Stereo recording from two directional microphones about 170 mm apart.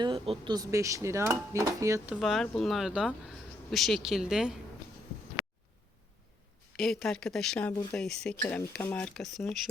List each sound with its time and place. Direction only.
0.0 s speech: 30° right (ahead or behind)
2.1 s speech: centre (ahead or behind)
6.7 s speech: centre (ahead or behind)